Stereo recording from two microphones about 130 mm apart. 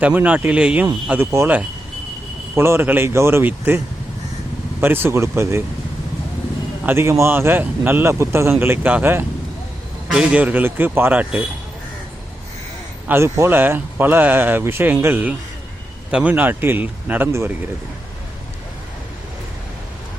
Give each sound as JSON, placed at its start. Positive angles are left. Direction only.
{"t": 0.0, "sound": "speech", "side_deg": -10}
{"t": 4.8, "sound": "speech", "side_deg": -15}
{"t": 6.8, "sound": "speech", "side_deg": -20}
{"t": 13.1, "sound": "speech", "side_deg": -20}